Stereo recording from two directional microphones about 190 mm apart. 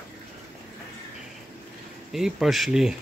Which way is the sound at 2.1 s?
Centre (ahead or behind).